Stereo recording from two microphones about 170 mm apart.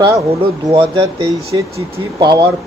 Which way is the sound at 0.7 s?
30° right (ahead or behind).